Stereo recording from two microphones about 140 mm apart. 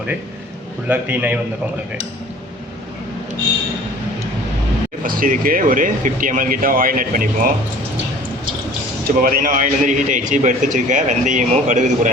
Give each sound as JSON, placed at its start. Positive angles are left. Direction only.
{"t": 0.9, "sound": "a man's voice", "side_deg": -10}
{"t": 5.0, "sound": "speech", "side_deg": -85}
{"t": 9.0, "sound": "a man's voice", "side_deg": -90}